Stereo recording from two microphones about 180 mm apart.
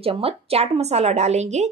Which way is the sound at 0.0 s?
30° right (ahead or behind).